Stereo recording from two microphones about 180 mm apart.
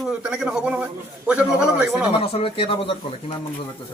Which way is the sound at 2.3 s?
30° left (ahead or behind).